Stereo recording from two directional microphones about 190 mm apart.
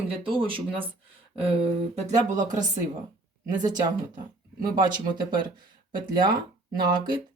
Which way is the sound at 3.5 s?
20° right (ahead or behind).